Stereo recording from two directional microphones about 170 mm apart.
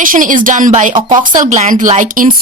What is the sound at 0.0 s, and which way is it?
Speech, 50° right (ahead or behind).